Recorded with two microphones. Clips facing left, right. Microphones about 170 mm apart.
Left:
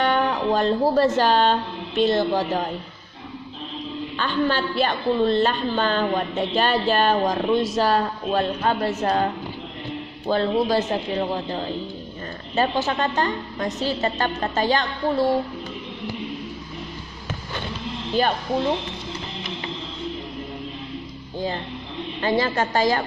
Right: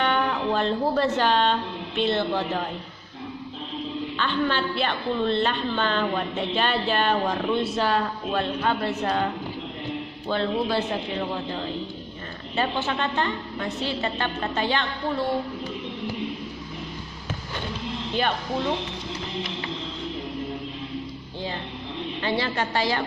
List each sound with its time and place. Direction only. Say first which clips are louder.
0.0 s a woman's voice: left 3 dB; 40° left (ahead or behind)
4.2 s a woman's voice: left 3 dB; 40° left (ahead or behind)
12.5 s a woman's voice: left 4 dB; 40° left (ahead or behind)
18.1 s a woman's voice: left 4 dB; 40° left (ahead or behind)
21.3 s music: left 6 dB; 45° left (ahead or behind)
22.2 s a woman's voice: left 5 dB; 45° left (ahead or behind)